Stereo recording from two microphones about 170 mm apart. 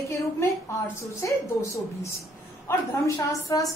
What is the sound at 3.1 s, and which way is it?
Speech, 20° left (ahead or behind).